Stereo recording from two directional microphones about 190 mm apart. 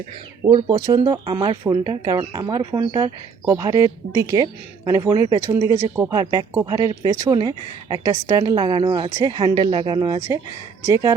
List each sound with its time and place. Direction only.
0.4 s speech: 20° right (ahead or behind)